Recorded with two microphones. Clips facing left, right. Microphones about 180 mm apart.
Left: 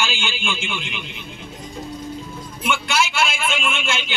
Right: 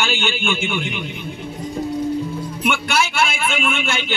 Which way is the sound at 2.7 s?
55° right (ahead or behind).